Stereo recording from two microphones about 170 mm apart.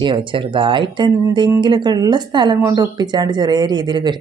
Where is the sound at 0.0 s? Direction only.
30° right (ahead or behind).